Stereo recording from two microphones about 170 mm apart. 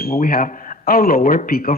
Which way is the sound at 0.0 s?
60° left (ahead or behind).